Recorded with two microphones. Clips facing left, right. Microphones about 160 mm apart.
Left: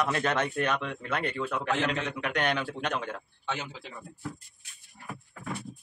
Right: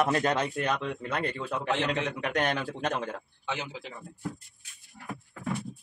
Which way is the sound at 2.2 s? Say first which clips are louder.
Left 1 dB; 40° right (ahead or behind).